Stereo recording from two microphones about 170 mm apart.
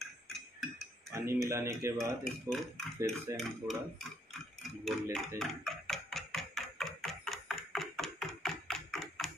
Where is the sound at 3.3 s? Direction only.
Centre (ahead or behind).